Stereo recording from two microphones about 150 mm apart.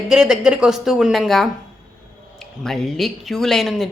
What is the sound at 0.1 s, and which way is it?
A woman's voice, 5° right (ahead or behind).